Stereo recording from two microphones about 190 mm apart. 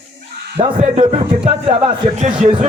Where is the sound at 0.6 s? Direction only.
30° right (ahead or behind).